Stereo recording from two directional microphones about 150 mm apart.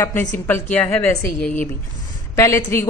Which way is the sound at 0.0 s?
20° left (ahead or behind).